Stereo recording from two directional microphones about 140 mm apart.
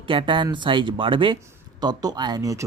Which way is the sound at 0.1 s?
35° right (ahead or behind).